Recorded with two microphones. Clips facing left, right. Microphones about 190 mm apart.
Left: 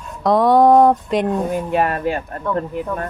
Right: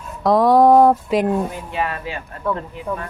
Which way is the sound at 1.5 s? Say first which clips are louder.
Left 6 dB; 50° left (ahead or behind).